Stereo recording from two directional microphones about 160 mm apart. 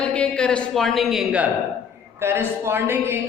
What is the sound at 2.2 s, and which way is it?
Speech, 15° right (ahead or behind).